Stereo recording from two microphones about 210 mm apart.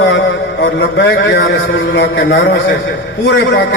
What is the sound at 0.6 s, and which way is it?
A man's voice, 50° left (ahead or behind).